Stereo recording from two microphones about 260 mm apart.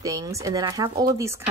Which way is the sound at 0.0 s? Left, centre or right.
Centre.